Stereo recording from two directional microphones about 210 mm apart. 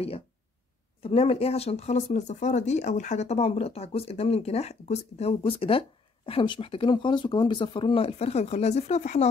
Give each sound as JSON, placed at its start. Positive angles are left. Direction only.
{"t": 1.0, "sound": "speech", "side_deg": 30}